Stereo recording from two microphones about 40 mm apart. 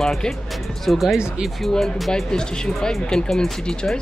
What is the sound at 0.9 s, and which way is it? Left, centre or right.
Speech, centre.